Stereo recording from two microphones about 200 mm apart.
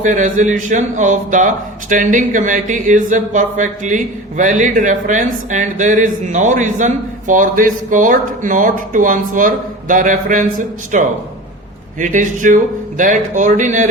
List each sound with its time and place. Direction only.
0.0 s speech: 40° right (ahead or behind)